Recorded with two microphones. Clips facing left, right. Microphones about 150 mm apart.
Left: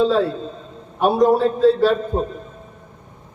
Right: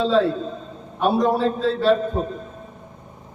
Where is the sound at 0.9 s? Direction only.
Centre (ahead or behind).